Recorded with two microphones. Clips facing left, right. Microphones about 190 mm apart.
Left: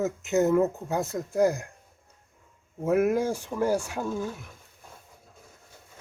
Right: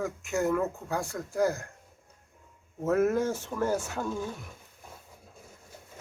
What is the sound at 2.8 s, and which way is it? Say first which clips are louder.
Speech: left 2 dB; 10° left (ahead or behind).